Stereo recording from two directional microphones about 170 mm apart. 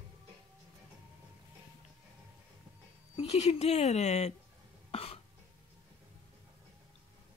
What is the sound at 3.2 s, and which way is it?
Speech, 35° left (ahead or behind).